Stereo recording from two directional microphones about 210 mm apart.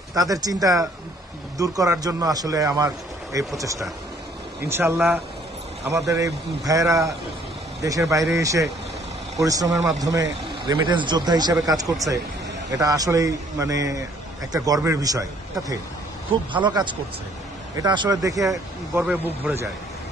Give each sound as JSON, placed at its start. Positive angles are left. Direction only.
{"t": 0.1, "sound": "speech", "side_deg": -15}
{"t": 16.5, "sound": "speech", "side_deg": -20}